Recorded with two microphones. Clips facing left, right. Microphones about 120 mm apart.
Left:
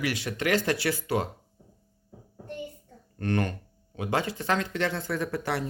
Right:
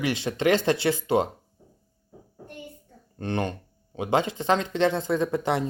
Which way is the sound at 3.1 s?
20° right (ahead or behind).